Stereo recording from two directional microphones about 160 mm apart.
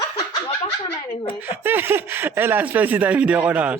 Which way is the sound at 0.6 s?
35° left (ahead or behind).